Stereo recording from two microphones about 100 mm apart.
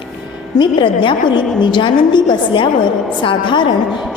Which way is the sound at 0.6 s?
55° left (ahead or behind).